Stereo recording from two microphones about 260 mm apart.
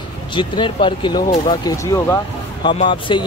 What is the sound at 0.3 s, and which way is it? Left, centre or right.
Speech, centre.